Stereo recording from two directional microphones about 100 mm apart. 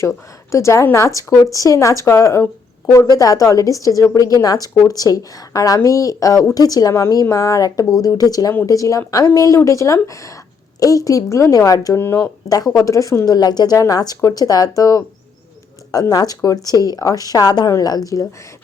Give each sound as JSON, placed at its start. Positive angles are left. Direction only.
{"t": 0.5, "sound": "speech", "side_deg": 30}
{"t": 12.0, "sound": "speech", "side_deg": 25}
{"t": 12.5, "sound": "speech", "side_deg": 40}